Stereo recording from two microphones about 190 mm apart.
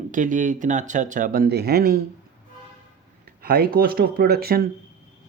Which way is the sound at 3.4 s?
50° right (ahead or behind).